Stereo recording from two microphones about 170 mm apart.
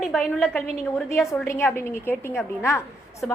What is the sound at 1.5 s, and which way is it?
A woman's voice, 15° left (ahead or behind).